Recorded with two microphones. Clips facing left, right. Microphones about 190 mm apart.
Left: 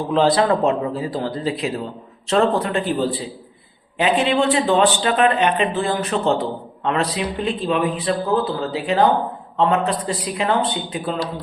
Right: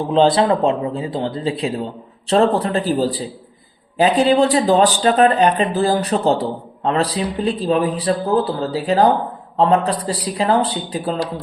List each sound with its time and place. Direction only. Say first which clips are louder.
0.1 s speech: right 2 dB; 25° right (ahead or behind)